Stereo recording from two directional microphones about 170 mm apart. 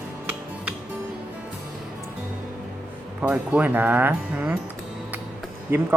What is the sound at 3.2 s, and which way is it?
Speech, 10° right (ahead or behind).